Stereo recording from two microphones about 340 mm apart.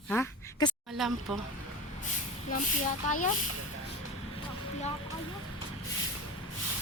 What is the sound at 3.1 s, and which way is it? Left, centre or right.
Speech, left.